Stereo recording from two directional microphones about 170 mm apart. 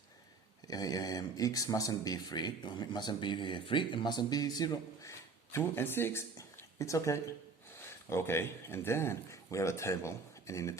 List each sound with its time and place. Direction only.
0.7 s speech: 20° left (ahead or behind)